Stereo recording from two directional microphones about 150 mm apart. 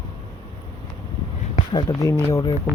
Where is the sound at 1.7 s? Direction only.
30° left (ahead or behind).